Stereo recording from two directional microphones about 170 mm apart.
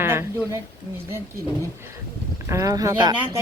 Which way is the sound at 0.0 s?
15° right (ahead or behind).